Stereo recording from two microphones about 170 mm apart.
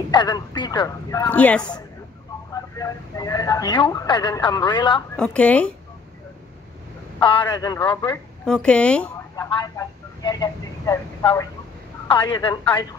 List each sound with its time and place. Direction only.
0.1 s speech: 25° left (ahead or behind)
1.3 s speech: 10° left (ahead or behind)
2.5 s speech: 20° left (ahead or behind)
5.1 s speech: 5° left (ahead or behind)
7.2 s speech: 30° left (ahead or behind)
8.5 s speech: 5° left (ahead or behind)
9.5 s speech: 25° left (ahead or behind)